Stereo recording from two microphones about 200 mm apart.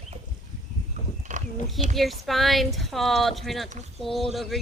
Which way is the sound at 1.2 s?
40° right (ahead or behind).